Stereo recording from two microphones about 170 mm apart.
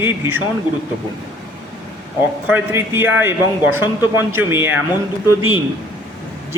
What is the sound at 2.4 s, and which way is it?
A man's voice, 15° right (ahead or behind).